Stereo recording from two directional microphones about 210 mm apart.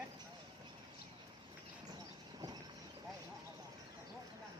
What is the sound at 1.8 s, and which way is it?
Vehicle, 20° right (ahead or behind).